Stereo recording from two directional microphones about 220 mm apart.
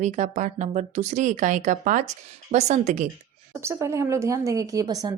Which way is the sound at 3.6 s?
10° right (ahead or behind).